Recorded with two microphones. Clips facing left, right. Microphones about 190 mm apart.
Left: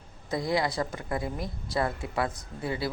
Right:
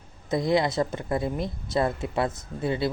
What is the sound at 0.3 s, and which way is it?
A woman's voice, 20° right (ahead or behind).